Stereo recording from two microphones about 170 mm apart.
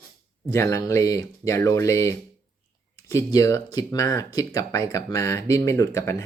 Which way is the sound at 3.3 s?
20° left (ahead or behind).